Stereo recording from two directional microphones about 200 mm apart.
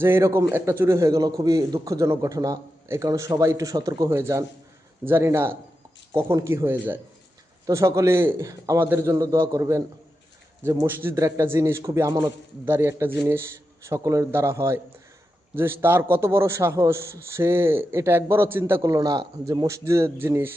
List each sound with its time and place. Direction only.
0.0 s a man's voice: 15° right (ahead or behind)